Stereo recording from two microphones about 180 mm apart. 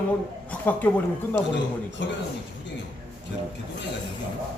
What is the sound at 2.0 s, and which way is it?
Speech, 80° left.